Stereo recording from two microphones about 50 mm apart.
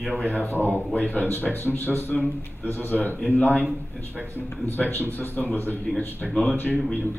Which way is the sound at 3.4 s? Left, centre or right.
Left.